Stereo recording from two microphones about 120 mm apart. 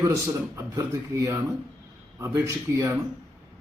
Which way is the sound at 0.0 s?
25° right (ahead or behind).